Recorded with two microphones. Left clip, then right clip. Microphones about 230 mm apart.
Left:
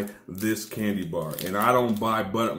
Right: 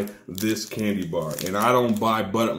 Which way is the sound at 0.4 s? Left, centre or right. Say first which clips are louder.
Right 2 dB; centre.